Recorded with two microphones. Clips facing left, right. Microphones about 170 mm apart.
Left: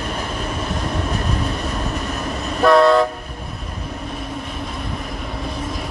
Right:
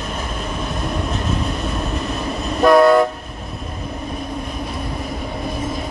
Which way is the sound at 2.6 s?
20° right (ahead or behind).